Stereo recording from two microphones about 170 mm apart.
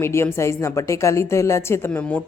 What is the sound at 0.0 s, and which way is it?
A woman's voice, 15° left (ahead or behind).